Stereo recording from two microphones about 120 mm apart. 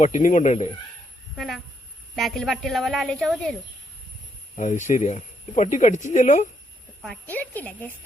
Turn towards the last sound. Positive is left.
turn(degrees=15)  # may be behind; listen again after turning